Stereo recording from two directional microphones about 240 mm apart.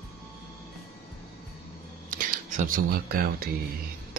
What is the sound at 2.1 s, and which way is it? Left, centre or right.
Speech, right.